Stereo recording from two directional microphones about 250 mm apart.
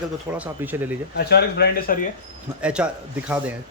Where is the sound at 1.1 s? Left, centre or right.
Left.